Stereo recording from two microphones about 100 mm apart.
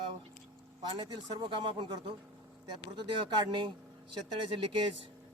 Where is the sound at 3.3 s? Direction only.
50° right (ahead or behind).